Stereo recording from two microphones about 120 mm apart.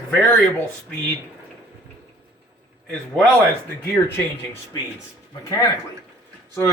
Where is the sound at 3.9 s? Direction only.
20° left (ahead or behind).